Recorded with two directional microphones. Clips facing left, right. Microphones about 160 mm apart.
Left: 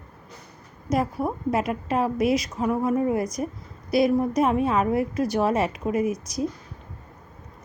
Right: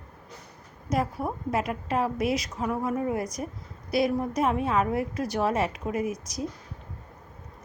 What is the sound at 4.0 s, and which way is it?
A woman's voice, 20° left (ahead or behind).